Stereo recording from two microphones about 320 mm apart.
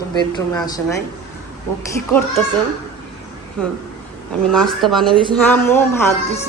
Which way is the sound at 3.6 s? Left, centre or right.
Centre.